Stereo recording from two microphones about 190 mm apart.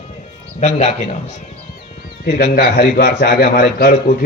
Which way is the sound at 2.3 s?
55° left (ahead or behind).